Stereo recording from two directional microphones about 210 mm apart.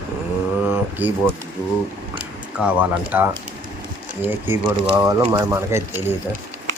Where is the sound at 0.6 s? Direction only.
10° right (ahead or behind).